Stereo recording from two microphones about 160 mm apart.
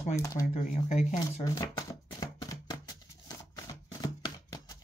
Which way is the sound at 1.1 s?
25° left (ahead or behind).